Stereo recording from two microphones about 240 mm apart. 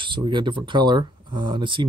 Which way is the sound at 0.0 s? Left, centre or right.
Centre.